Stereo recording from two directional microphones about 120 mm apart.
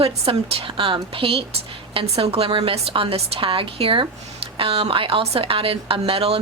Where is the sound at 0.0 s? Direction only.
50° right (ahead or behind).